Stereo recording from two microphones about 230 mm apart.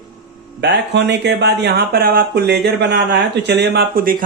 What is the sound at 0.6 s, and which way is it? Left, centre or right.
Speech, right.